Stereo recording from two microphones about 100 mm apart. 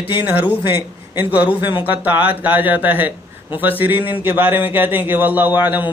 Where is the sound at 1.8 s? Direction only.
15° right (ahead or behind).